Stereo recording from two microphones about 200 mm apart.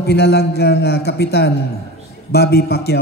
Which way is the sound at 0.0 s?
55° left (ahead or behind).